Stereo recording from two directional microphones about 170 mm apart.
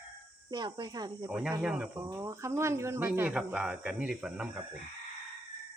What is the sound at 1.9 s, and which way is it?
Speech, 20° right (ahead or behind).